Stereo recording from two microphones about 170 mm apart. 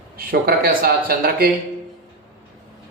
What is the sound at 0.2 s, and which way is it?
A man's voice, 60° right (ahead or behind).